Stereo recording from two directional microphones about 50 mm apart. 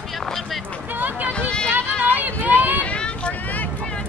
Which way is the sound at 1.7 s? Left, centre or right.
Right.